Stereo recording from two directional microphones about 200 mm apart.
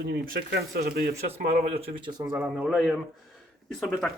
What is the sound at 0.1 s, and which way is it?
Speech, 55° right (ahead or behind).